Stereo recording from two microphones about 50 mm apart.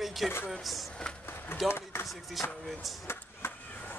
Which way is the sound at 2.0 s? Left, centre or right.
Centre.